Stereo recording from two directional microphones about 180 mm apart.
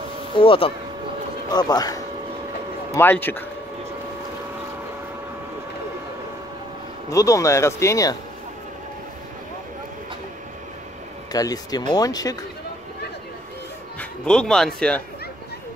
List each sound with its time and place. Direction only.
0.4 s speech: 30° left (ahead or behind); by 3.4 s 10° left (ahead or behind)
7.1 s speech: 15° left (ahead or behind)
11.3 s speech: 20° left (ahead or behind)
13.9 s speech: 5° left (ahead or behind)